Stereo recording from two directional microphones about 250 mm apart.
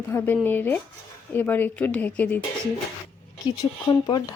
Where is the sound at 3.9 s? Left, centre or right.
Centre.